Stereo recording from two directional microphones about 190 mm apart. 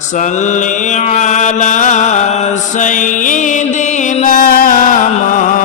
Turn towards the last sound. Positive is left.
turn(degrees=40)  # may be behind; listen again after turning